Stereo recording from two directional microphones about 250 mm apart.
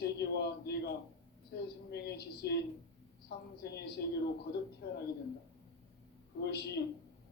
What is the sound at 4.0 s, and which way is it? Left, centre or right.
Speech, left.